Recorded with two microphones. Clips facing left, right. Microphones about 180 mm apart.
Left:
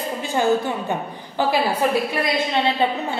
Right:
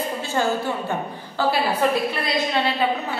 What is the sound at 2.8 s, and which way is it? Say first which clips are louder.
Speech: left 1 dB; 25° left (ahead or behind).